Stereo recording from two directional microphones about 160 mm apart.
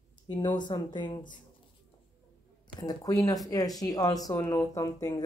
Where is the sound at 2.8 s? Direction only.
20° left (ahead or behind).